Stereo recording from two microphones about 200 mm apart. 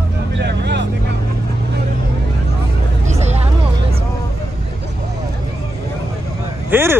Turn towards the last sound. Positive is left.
turn(degrees=-10)  # may be behind; listen again after turning